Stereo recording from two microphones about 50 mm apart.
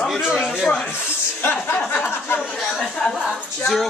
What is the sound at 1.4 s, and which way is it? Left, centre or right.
Chuckle, left.